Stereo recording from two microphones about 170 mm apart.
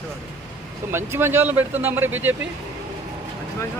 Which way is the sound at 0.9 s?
15° right (ahead or behind).